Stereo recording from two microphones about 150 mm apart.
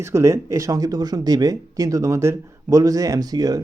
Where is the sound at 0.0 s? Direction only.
20° right (ahead or behind).